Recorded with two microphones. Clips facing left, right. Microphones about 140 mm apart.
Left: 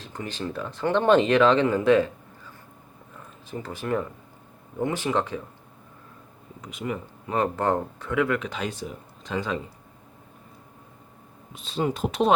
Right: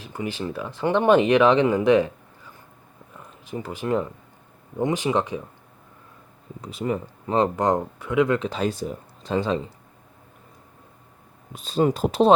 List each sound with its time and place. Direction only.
0.0 s speech: 10° right (ahead or behind)
3.5 s speech: 15° right (ahead or behind)
6.6 s speech: 30° right (ahead or behind)
11.5 s speech: 40° right (ahead or behind)